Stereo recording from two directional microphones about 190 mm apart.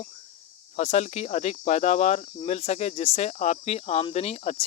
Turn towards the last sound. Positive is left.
turn(degrees=35)  # may be behind; listen again after turning